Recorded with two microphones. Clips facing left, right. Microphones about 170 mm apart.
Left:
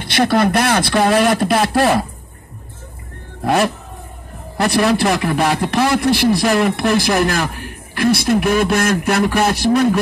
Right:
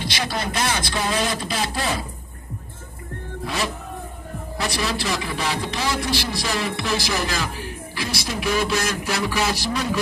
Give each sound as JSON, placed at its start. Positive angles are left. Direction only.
{"t": 0.0, "sound": "a man's voice", "side_deg": 60}
{"t": 3.4, "sound": "a man's voice", "side_deg": 60}